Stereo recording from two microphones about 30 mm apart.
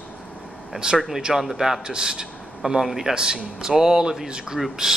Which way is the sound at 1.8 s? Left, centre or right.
Right.